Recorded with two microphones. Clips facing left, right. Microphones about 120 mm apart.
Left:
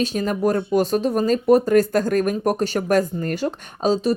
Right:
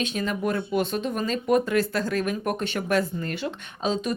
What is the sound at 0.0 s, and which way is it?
Speech, 40° left (ahead or behind).